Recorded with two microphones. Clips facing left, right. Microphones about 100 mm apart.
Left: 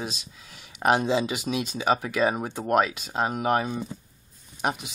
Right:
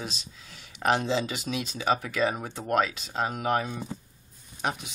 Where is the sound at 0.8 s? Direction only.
15° left (ahead or behind).